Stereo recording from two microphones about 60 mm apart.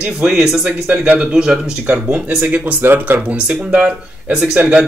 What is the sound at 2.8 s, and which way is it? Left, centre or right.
Speech, right.